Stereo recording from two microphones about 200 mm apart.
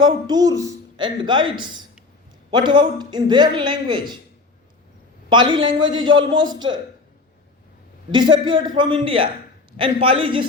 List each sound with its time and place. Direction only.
0.0 s a man's voice: 20° right (ahead or behind)
5.3 s a man's voice: 25° right (ahead or behind)
8.1 s a man's voice: 25° right (ahead or behind)